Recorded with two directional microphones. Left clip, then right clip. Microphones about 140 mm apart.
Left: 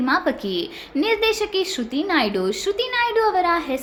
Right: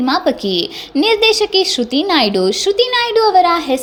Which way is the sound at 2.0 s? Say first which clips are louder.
Right 6 dB; 40° right (ahead or behind).